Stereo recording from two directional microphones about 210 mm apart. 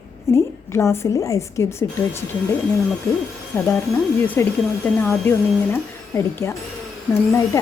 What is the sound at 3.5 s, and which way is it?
Speech, 10° left (ahead or behind).